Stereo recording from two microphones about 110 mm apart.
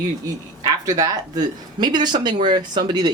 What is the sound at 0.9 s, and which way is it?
Speech, 35° right (ahead or behind).